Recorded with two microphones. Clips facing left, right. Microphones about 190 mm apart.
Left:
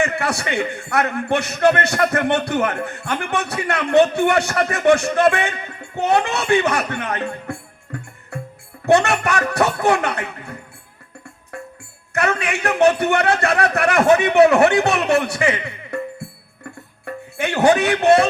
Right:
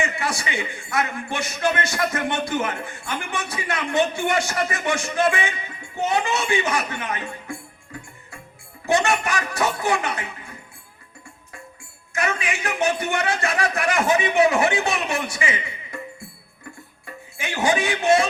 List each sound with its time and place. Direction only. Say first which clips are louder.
0.0 s a man's voice: left 5 dB; 60° left (ahead or behind)
8.3 s music: left 13 dB; 65° left (ahead or behind)
8.9 s a man's voice: left 5 dB; 65° left (ahead or behind)
11.5 s music: left 10 dB; 65° left (ahead or behind)
12.1 s a man's voice: left 5 dB; 65° left (ahead or behind)
16.6 s music: left 8 dB; 60° left (ahead or behind)